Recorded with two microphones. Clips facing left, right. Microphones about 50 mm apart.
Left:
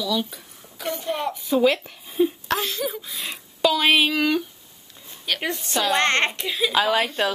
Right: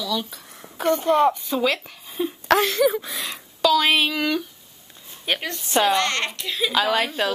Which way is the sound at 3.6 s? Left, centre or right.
Centre.